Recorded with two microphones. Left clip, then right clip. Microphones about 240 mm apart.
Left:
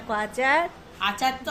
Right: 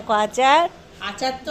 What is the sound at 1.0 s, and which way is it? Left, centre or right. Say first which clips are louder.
Speech: left 1 dB; left.